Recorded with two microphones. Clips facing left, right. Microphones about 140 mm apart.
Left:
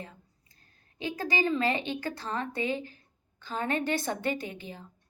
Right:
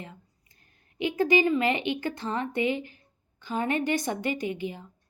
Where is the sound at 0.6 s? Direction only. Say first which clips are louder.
Right 6 dB; 20° right (ahead or behind).